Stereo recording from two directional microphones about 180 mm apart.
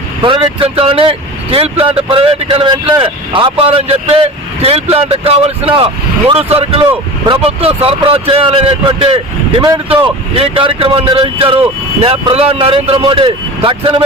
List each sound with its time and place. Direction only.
0.2 s speech: 30° right (ahead or behind)